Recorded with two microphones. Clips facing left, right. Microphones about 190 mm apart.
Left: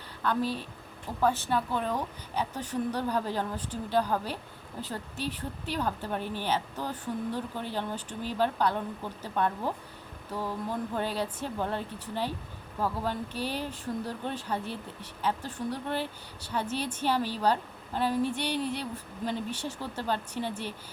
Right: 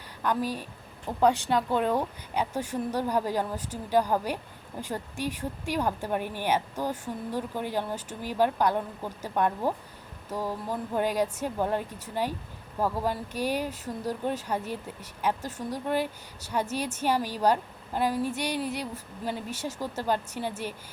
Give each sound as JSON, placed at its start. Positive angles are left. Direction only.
{"t": 0.2, "sound": "speech", "side_deg": -15}
{"t": 15.4, "sound": "a woman's voice", "side_deg": -45}
{"t": 15.7, "sound": "speech", "side_deg": -10}